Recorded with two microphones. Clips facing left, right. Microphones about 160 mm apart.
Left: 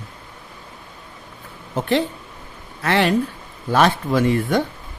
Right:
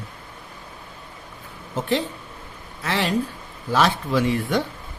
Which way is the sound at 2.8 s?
65° left (ahead or behind).